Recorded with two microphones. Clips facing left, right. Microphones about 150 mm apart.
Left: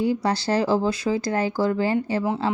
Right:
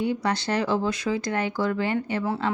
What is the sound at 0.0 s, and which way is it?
Speech, 30° left (ahead or behind).